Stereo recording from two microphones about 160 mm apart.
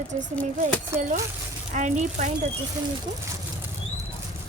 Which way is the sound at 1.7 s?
50° right (ahead or behind).